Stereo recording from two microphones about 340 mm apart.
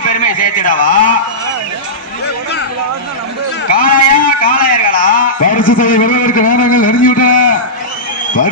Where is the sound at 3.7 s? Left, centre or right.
Left.